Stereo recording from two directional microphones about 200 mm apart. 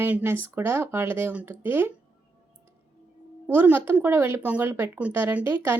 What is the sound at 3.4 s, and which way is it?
A woman's voice, 10° right (ahead or behind).